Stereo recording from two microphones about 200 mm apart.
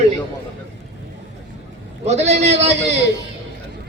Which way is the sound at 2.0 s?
35° right (ahead or behind).